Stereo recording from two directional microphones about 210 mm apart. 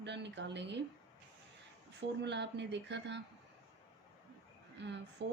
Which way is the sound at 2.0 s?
55° right (ahead or behind).